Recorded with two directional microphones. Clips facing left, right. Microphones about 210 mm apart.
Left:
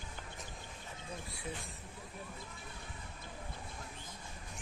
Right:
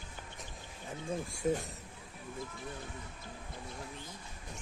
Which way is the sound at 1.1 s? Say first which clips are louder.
Right 12 dB; 45° right (ahead or behind).